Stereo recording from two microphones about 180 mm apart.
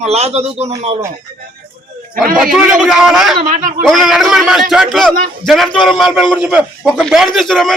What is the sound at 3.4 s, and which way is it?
Speech, 45° right (ahead or behind).